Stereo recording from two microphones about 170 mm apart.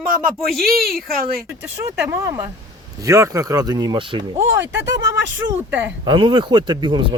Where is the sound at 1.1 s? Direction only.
60° right (ahead or behind).